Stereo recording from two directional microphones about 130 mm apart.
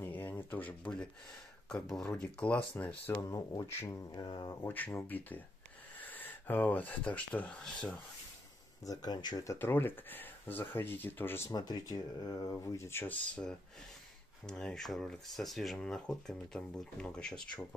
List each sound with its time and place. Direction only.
0.0 s a sound: 15° left (ahead or behind)
1.7 s speech: 5° left (ahead or behind)
3.2 s speech: 30° left (ahead or behind); by 8.0 s 5° left (ahead or behind)
8.8 s speech: 30° left (ahead or behind)
11.5 s speech: 30° left (ahead or behind); by 17.4 s 5° left (ahead or behind)